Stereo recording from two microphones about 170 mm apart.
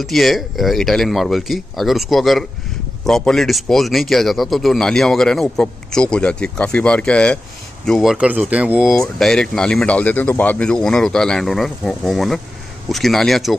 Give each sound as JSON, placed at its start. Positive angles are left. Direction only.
{"t": 0.0, "sound": "speech", "side_deg": 0}